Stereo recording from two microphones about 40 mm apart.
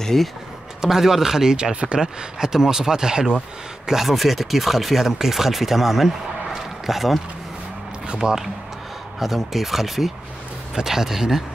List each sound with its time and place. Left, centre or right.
0.0 s speech: centre
0.7 s speech: centre
3.8 s speech: centre
8.2 s speech: centre